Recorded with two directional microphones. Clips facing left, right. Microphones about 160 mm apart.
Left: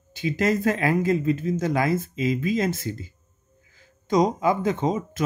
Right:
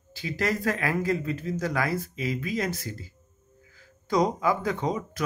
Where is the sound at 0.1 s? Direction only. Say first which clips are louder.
Left 6 dB; 20° left (ahead or behind).